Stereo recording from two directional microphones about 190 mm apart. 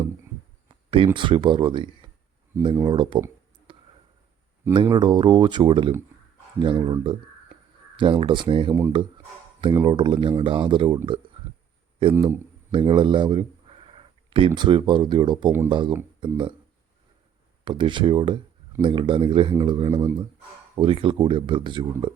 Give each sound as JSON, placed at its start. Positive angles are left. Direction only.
{"t": 0.9, "sound": "speech", "side_deg": -25}
{"t": 3.7, "sound": "a sound", "side_deg": -25}
{"t": 4.7, "sound": "speech", "side_deg": -25}
{"t": 12.1, "sound": "speech", "side_deg": -15}
{"t": 12.7, "sound": "speech", "side_deg": -25}
{"t": 17.7, "sound": "speech", "side_deg": -25}